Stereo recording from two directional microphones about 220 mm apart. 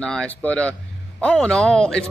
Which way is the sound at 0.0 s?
5° left (ahead or behind).